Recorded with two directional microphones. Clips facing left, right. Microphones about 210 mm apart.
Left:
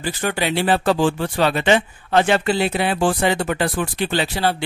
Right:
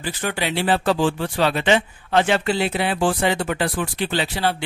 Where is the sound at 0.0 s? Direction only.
40° left (ahead or behind).